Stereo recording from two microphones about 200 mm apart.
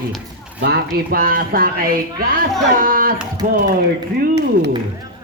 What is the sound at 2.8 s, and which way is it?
Speech, 45° right (ahead or behind).